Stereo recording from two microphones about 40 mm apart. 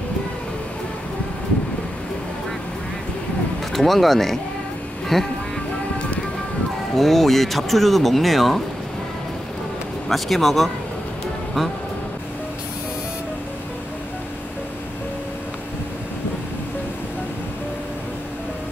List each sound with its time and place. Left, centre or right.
3.7 s speech: centre
7.0 s speech: centre
10.0 s speech: centre